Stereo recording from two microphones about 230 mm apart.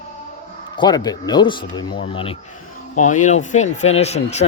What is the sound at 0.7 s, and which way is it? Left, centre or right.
Speech, centre.